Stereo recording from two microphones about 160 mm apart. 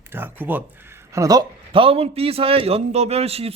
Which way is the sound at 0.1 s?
10° right (ahead or behind).